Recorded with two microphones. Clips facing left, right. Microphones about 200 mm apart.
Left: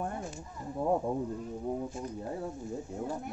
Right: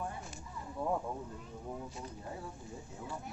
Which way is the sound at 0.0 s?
55° left (ahead or behind).